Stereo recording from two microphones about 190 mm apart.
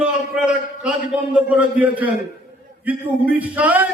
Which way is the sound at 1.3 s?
5° right (ahead or behind).